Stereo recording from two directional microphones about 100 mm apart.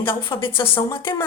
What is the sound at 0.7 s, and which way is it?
Speech, 25° left (ahead or behind).